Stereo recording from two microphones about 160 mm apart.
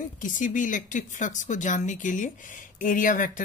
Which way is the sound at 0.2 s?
55° left (ahead or behind).